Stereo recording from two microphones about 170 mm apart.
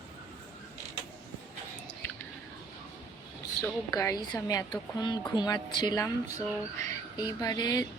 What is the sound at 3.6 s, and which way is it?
A woman's voice, 20° left (ahead or behind).